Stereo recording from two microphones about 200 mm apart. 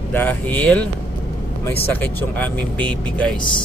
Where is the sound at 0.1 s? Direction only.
10° left (ahead or behind).